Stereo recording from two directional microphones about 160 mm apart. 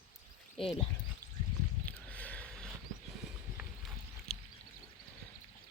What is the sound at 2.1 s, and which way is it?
Sniff, 10° left (ahead or behind).